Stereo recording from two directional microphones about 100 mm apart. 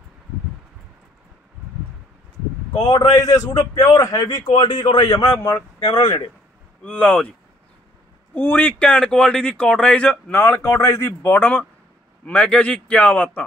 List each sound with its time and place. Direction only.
2.7 s a man's voice: 40° left (ahead or behind)
5.0 s a man's voice: 30° left (ahead or behind)
6.8 s speech: 15° left (ahead or behind)
8.4 s speech: 20° left (ahead or behind)